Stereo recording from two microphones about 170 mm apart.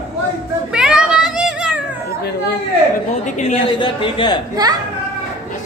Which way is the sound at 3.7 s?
30° left (ahead or behind).